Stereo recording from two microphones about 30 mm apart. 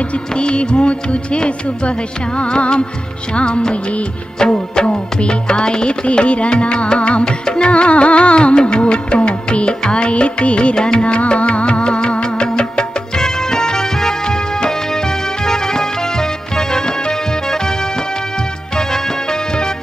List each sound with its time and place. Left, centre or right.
0.3 s music: left
6.0 s music: left
11.1 s music: left